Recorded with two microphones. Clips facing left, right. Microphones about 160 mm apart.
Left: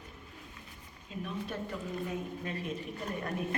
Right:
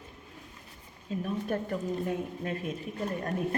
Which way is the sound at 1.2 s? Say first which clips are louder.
Right 6 dB; 50° right (ahead or behind).